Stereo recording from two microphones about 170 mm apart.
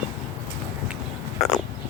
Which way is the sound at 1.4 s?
Centre (ahead or behind).